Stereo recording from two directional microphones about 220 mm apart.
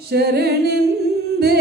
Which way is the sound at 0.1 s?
45° right (ahead or behind).